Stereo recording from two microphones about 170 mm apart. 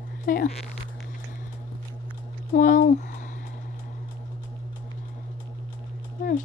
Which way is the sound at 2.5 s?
50° left (ahead or behind).